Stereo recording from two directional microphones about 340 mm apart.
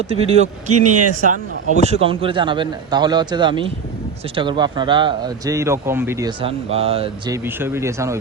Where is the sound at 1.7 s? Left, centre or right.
Centre.